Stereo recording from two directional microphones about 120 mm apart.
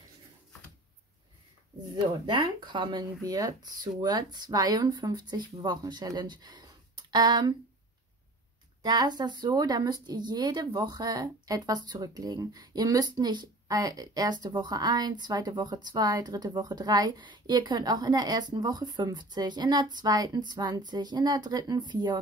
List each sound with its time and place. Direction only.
2.0 s speech: 45° right (ahead or behind)
8.8 s speech: 35° right (ahead or behind)